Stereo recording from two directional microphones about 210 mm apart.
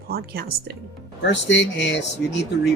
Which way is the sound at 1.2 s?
55° left (ahead or behind).